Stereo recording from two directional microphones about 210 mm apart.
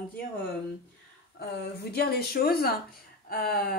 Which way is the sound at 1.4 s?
50° left (ahead or behind).